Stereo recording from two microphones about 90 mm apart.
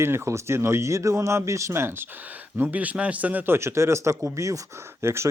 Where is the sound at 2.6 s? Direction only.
15° right (ahead or behind).